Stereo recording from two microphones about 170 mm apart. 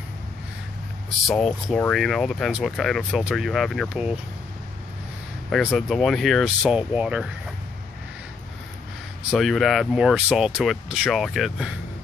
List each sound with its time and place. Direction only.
1.2 s speech: centre (ahead or behind)
5.5 s speech: centre (ahead or behind)
9.3 s speech: centre (ahead or behind)